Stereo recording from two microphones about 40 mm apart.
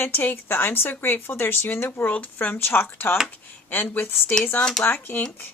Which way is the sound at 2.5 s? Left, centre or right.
Left.